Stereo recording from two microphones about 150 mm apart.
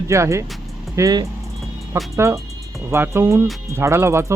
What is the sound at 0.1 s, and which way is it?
Speech, 20° right (ahead or behind).